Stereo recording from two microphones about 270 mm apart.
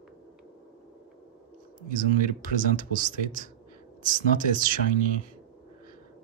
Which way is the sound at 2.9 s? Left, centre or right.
Right.